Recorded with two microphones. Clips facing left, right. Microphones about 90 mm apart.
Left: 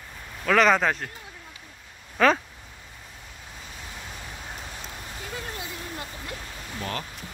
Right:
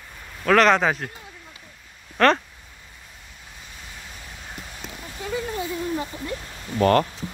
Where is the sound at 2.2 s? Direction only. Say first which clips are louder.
Right 2 dB; centre (ahead or behind).